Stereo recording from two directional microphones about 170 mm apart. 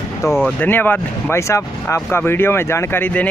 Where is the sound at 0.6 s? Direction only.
10° left (ahead or behind).